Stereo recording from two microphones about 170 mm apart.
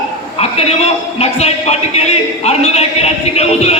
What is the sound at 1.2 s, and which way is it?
A man's voice, 40° left (ahead or behind).